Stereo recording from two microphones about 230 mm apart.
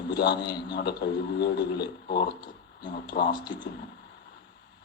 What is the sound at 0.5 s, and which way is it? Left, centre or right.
A man's voice, left.